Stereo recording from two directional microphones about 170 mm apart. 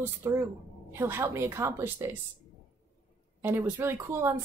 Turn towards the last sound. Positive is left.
turn(degrees=-15)  # may be behind; listen again after turning